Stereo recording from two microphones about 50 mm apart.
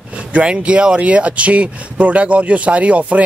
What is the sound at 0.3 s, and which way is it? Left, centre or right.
Speech, right.